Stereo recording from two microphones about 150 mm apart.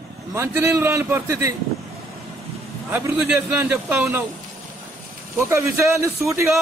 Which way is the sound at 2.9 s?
10° right (ahead or behind).